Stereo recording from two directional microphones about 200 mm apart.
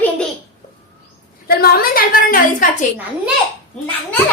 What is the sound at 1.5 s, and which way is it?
A woman's voice, 50° left (ahead or behind).